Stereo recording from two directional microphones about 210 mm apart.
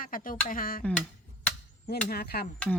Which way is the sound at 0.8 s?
5° left (ahead or behind).